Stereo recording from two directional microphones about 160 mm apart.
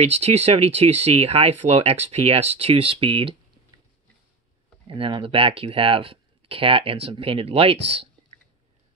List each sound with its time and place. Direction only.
0.0 s speech: 40° right (ahead or behind)
4.8 s speech: 35° right (ahead or behind)